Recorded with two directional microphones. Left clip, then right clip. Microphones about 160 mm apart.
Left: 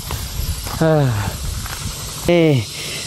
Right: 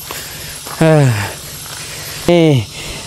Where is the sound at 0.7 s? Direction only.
45° right (ahead or behind).